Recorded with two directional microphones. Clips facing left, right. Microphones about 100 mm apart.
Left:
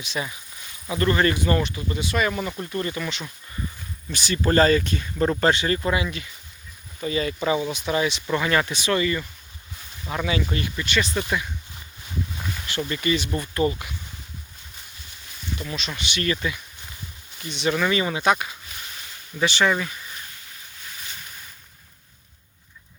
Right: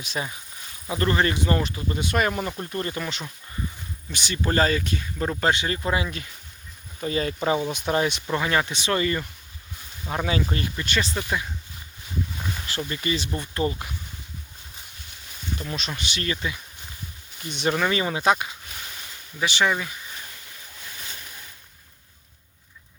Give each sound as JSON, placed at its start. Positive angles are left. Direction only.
{"t": 0.0, "sound": "speech", "side_deg": -45}
{"t": 0.9, "sound": "speech", "side_deg": -30}
{"t": 1.6, "sound": "speech", "side_deg": -40}
{"t": 4.1, "sound": "speech", "side_deg": -20}
{"t": 5.9, "sound": "speech", "side_deg": -35}
{"t": 7.7, "sound": "speech", "side_deg": -50}
{"t": 8.3, "sound": "speech", "side_deg": -20}
{"t": 12.9, "sound": "speech", "side_deg": -30}
{"t": 15.5, "sound": "speech", "side_deg": -40}
{"t": 16.2, "sound": "speech", "side_deg": -20}
{"t": 17.5, "sound": "speech", "side_deg": -50}
{"t": 17.7, "sound": "speech", "side_deg": -30}
{"t": 19.4, "sound": "speech", "side_deg": -15}